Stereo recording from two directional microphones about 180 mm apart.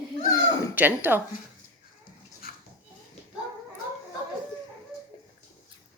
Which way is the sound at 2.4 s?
55° left (ahead or behind).